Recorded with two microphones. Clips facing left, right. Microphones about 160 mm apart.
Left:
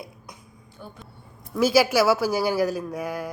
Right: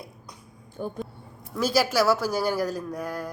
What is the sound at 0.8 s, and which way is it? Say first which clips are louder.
Speech: right 10 dB; 45° right (ahead or behind).